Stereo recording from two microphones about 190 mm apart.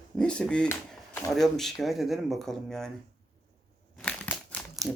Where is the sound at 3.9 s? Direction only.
5° left (ahead or behind).